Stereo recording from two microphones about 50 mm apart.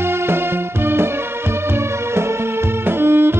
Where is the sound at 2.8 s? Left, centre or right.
Right.